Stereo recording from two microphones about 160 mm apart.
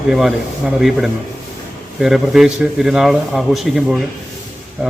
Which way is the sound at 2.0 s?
Centre (ahead or behind).